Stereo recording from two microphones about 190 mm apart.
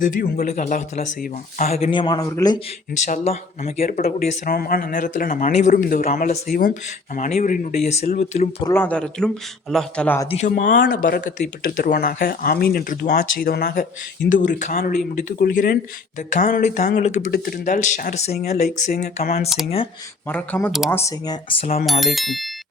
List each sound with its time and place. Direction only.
0.0 s speech: 45° left (ahead or behind)
1.7 s speech: 30° left (ahead or behind)
3.1 s speech: 35° left (ahead or behind)
4.5 s speech: 50° left (ahead or behind)
8.7 s a man's voice: 10° left (ahead or behind)
10.2 s speech: 35° left (ahead or behind); by 13.8 s 55° left (ahead or behind)
14.3 s speech: 45° left (ahead or behind)
20.2 s a man's voice: 10° left (ahead or behind)